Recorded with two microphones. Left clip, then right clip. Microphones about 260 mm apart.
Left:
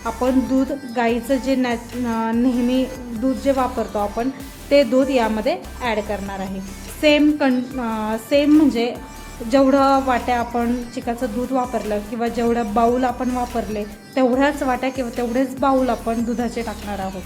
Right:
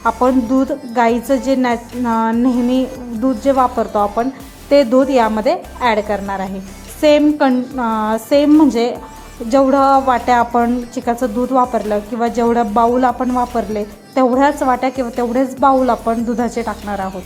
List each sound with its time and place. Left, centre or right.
0.0 s speech: centre
9.5 s speech: centre
13.1 s speech: centre